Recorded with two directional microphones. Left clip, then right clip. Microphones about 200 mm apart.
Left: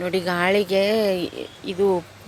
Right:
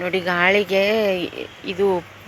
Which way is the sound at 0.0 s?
20° left (ahead or behind).